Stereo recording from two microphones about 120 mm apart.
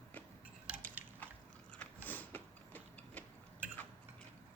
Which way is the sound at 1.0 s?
15° right (ahead or behind).